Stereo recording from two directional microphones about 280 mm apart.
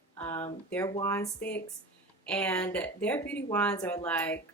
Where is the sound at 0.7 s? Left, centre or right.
Centre.